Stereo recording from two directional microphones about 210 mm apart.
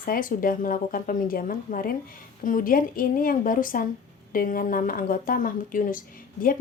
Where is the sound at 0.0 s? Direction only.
40° left (ahead or behind).